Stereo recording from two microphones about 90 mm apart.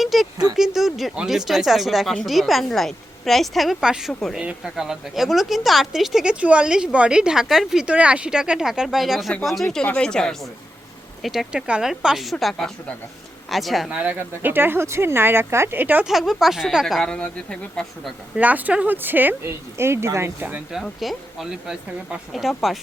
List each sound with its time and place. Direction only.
0.0 s a sound: centre (ahead or behind)
0.5 s a woman's voice: 5° right (ahead or behind)
6.3 s a woman's voice: 15° right (ahead or behind)
9.7 s a woman's voice: 10° left (ahead or behind)
13.9 s speech: 15° right (ahead or behind)
16.0 s a woman's voice: 5° right (ahead or behind)
18.3 s speech: 15° right (ahead or behind)
20.8 s a woman's voice: centre (ahead or behind)